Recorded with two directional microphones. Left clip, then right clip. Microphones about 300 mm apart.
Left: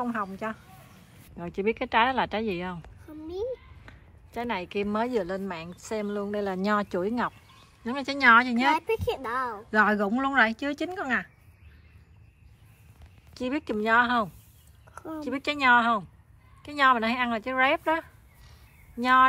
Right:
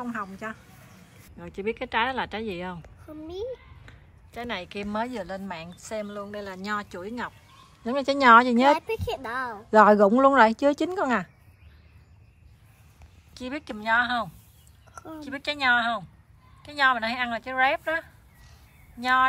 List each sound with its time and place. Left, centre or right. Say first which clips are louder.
0.0 s a woman's voice: left 3 dB; centre
7.8 s speech: right 2 dB; centre
8.7 s a woman's voice: left 2 dB; centre
9.7 s speech: right 8 dB; centre
13.3 s a woman's voice: left 5 dB; centre